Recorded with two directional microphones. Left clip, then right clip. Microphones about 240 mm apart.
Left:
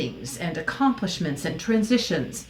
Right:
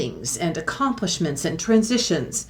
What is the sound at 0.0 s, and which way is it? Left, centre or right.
Speech, right.